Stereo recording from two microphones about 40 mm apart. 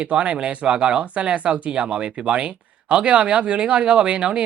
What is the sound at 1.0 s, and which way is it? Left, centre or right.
Speech, right.